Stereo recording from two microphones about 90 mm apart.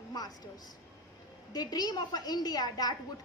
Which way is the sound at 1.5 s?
45° left (ahead or behind).